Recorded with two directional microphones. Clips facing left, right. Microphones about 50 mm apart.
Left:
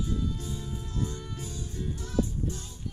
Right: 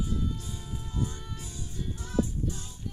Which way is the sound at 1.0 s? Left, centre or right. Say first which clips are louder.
Even; right.